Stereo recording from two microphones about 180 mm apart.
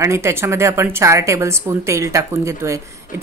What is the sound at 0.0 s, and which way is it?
A woman's voice, 15° right (ahead or behind).